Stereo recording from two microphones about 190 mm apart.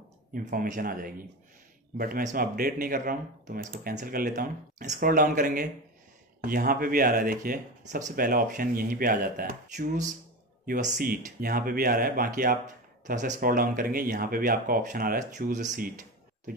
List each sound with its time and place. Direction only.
0.3 s speech: 45° right (ahead or behind)